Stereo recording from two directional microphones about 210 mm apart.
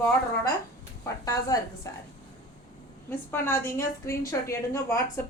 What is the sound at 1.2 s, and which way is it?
Speech, 15° left (ahead or behind).